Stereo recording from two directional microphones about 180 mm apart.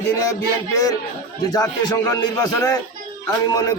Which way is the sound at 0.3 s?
20° left (ahead or behind).